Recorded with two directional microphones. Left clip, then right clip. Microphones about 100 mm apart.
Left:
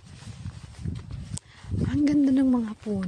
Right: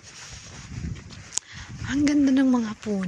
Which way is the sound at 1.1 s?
20° left (ahead or behind).